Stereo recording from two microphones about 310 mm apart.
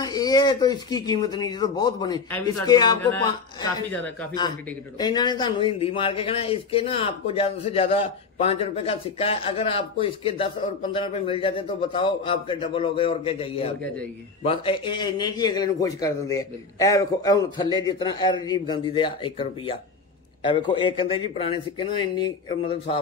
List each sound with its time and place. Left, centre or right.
0.0 s speech: centre